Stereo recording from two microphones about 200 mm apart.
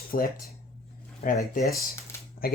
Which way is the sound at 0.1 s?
45° left (ahead or behind).